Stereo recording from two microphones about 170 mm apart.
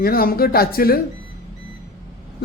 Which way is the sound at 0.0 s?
60° left (ahead or behind).